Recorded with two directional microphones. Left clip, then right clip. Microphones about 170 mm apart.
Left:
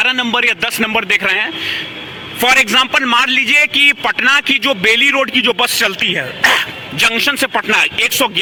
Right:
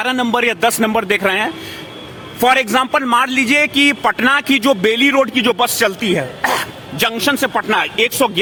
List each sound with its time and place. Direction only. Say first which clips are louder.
0.0 s a man's voice: left 2 dB; 25° right (ahead or behind); by 7.9 s centre (ahead or behind)
7.9 s a man's voice: left 1 dB; 10° right (ahead or behind)